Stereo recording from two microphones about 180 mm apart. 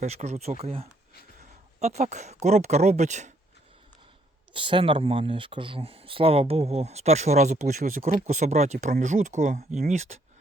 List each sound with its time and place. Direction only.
0.0 s speech: 40° right (ahead or behind)
4.5 s speech: 30° right (ahead or behind)